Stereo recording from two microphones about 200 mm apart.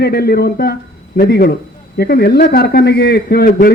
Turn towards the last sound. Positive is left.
turn(degrees=50)  # may be behind; listen again after turning